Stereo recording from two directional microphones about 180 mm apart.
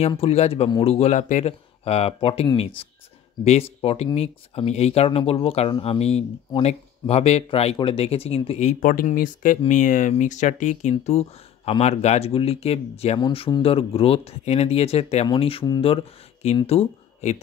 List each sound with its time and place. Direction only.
0.1 s speech: 35° left (ahead or behind)
8.9 s speech: 50° left (ahead or behind)